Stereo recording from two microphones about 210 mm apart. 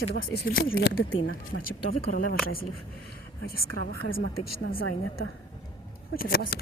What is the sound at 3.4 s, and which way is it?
Speech, 45° left (ahead or behind).